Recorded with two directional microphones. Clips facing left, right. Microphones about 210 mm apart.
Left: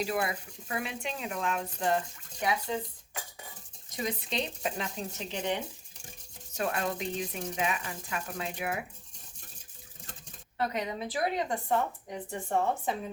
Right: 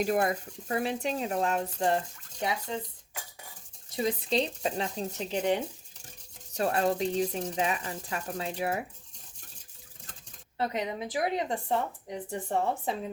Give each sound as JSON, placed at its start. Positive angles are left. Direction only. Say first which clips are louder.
{"t": 0.0, "sound": "speech", "louder": "right 5 dB", "side_deg": -45}
{"t": 3.9, "sound": "speech", "louder": "right 5 dB", "side_deg": -30}
{"t": 6.6, "sound": "speech", "louder": "right 5 dB", "side_deg": -35}
{"t": 10.6, "sound": "speech", "louder": "right 1 dB", "side_deg": -25}